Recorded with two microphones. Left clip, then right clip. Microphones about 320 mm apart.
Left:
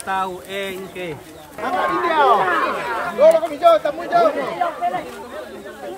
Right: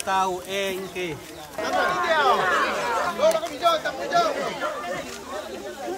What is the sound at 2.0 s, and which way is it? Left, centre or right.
Speech, centre.